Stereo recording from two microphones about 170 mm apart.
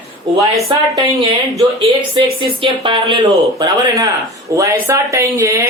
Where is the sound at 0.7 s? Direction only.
20° right (ahead or behind).